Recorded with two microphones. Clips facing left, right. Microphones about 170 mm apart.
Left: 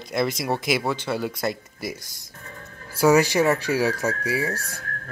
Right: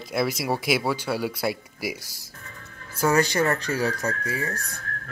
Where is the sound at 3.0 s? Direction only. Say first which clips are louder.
Left 4 dB; 10° left (ahead or behind).